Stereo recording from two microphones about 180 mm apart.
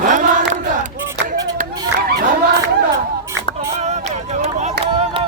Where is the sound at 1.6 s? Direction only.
55° right (ahead or behind).